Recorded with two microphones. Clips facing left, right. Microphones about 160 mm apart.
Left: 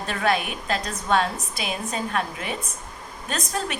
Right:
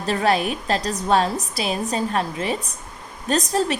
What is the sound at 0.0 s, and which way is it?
A woman's voice, 35° right (ahead or behind).